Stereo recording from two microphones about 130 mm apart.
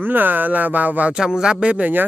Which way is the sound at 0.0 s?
15° right (ahead or behind).